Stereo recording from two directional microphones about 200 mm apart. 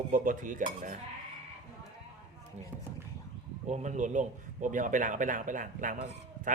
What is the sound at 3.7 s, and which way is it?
A man's voice, 35° right (ahead or behind).